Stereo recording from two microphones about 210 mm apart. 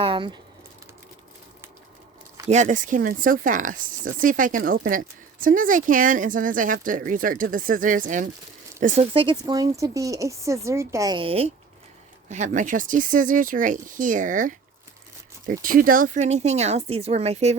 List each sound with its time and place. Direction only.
0.0 s speech: 25° right (ahead or behind)
2.5 s speech: 35° right (ahead or behind)
8.8 s speech: 30° right (ahead or behind)